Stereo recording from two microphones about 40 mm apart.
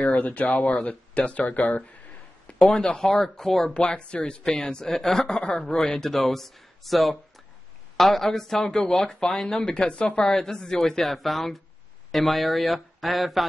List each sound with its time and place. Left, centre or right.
0.1 s speech: left
2.6 s a woman's voice: centre
3.7 s a woman's voice: left; by 13.5 s centre